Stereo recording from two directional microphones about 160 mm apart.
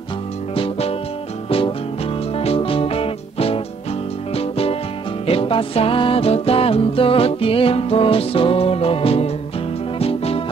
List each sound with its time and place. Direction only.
0.6 s music: 40° left (ahead or behind)
2.3 s music: 35° left (ahead or behind)